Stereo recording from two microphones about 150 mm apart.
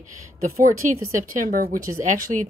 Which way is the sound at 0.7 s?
65° right (ahead or behind).